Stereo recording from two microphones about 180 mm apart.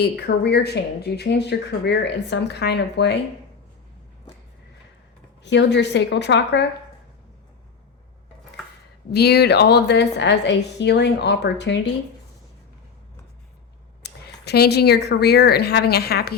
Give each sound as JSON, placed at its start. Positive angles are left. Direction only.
{"t": 0.0, "sound": "speech", "side_deg": 70}
{"t": 5.4, "sound": "speech", "side_deg": 75}
{"t": 9.1, "sound": "speech", "side_deg": 65}
{"t": 14.0, "sound": "a woman's voice", "side_deg": 65}